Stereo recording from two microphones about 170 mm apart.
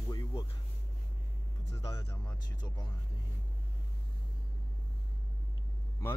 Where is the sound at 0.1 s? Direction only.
20° left (ahead or behind).